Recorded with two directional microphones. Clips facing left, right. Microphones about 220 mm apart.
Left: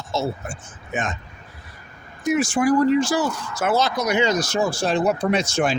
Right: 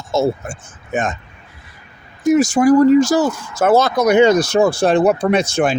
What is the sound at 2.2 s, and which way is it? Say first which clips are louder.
Speech: right 7 dB; 40° right (ahead or behind).